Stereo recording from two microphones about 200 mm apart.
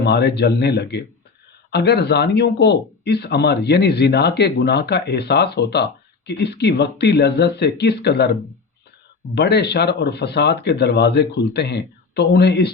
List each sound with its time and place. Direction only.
0.0 s speech: 55° left (ahead or behind)